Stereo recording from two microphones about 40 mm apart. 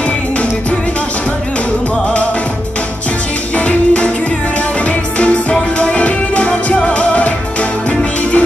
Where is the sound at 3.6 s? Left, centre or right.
Left.